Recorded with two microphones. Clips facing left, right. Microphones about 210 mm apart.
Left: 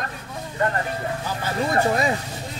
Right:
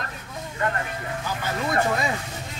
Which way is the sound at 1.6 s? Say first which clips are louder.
Left 4 dB; 35° left (ahead or behind).